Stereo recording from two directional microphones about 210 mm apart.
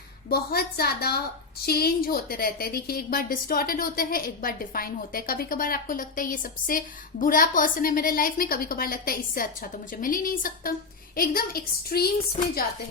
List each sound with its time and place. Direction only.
0.3 s a woman's voice: 50° left (ahead or behind)